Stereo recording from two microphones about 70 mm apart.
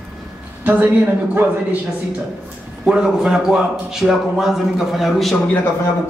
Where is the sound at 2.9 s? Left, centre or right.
Centre.